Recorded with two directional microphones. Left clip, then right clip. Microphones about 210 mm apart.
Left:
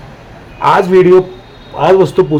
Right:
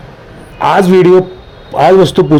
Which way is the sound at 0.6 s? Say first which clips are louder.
Right 1 dB; 35° right (ahead or behind).